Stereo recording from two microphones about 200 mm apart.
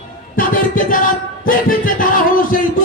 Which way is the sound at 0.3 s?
45° left (ahead or behind).